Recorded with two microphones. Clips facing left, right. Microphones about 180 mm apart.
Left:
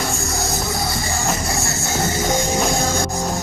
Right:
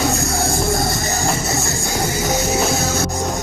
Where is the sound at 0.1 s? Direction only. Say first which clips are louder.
Right 4 dB; 55° right (ahead or behind).